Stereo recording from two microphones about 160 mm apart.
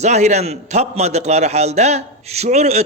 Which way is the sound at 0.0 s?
45° right (ahead or behind).